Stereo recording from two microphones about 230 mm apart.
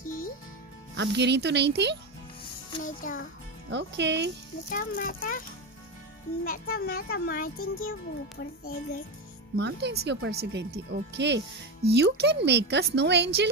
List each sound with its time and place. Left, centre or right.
0.0 s music: left
0.9 s speech: right
2.8 s a child's voice: left
3.7 s speech: right
4.7 s a child's voice: left
6.4 s a child's voice: left
9.6 s speech: right